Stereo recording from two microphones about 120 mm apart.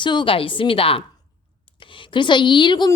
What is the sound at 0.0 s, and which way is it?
A woman's voice, 40° left (ahead or behind).